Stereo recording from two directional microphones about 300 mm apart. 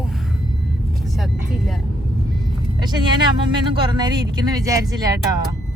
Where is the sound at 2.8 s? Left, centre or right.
Centre.